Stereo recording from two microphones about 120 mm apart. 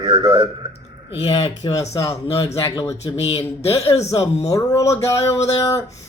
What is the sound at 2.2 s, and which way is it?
A man's voice, 55° left (ahead or behind).